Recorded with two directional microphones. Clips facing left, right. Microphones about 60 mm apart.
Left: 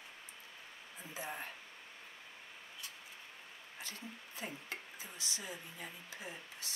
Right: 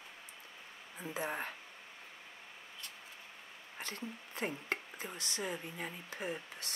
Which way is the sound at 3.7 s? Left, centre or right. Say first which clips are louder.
Right 5 dB; right.